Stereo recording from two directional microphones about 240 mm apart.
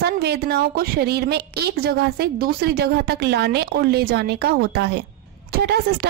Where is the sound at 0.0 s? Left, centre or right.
Right.